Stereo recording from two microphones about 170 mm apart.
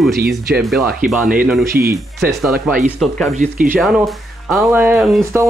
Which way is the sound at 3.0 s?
Centre (ahead or behind).